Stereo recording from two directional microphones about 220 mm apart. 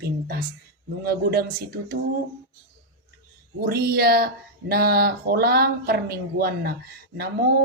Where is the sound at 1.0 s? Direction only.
45° right (ahead or behind).